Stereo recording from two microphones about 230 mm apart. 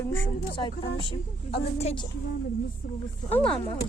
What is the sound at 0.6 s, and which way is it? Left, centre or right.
Speech, left.